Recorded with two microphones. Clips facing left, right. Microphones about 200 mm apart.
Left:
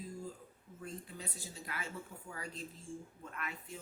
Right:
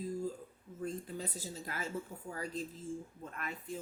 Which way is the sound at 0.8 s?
40° right (ahead or behind).